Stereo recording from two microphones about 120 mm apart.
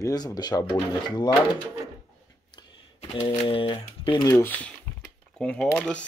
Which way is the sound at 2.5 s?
45° left (ahead or behind).